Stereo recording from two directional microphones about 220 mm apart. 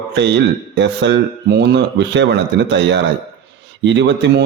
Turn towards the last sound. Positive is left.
turn(degrees=-55)  # may be behind; listen again after turning